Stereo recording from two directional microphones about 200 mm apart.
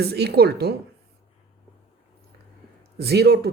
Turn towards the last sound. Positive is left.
turn(degrees=-50)  # may be behind; listen again after turning